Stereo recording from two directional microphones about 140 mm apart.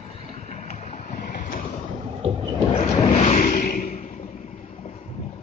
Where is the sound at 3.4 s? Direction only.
75° left (ahead or behind); by 4.1 s 60° left (ahead or behind).